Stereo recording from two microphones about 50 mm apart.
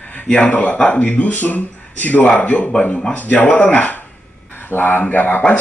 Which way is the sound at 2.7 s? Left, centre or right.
Centre.